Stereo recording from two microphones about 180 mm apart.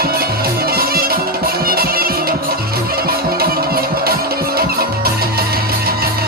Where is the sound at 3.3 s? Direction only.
55° right (ahead or behind).